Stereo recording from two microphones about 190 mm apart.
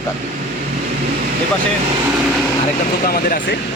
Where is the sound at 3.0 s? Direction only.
50° left (ahead or behind).